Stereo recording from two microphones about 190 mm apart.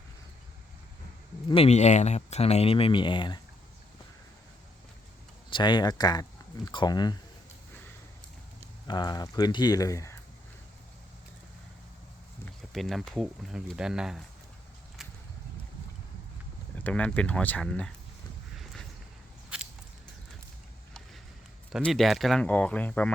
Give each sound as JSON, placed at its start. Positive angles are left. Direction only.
{"t": 1.5, "sound": "speech", "side_deg": 30}
{"t": 5.5, "sound": "speech", "side_deg": 25}
{"t": 8.9, "sound": "speech", "side_deg": 20}
{"t": 12.5, "sound": "speech", "side_deg": 0}
{"t": 16.7, "sound": "speech", "side_deg": 10}
{"t": 18.5, "sound": "a sound", "side_deg": 0}
{"t": 21.7, "sound": "speech", "side_deg": 5}